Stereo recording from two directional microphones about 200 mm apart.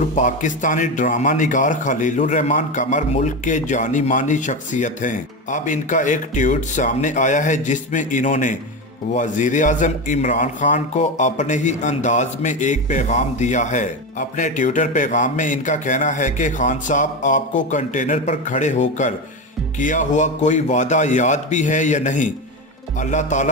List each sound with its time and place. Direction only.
0.1 s a man's voice: 40° left (ahead or behind)